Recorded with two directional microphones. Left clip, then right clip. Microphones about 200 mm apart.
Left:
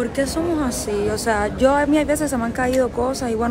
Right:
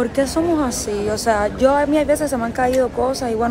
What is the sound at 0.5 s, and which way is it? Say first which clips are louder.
A woman's voice: right 2 dB; 5° left (ahead or behind).